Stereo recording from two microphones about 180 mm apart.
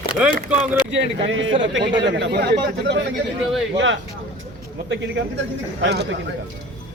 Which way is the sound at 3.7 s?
90° right.